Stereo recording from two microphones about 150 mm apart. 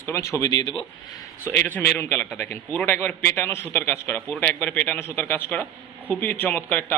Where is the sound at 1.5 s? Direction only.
15° left (ahead or behind).